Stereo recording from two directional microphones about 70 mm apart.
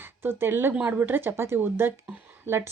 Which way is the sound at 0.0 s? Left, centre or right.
Right.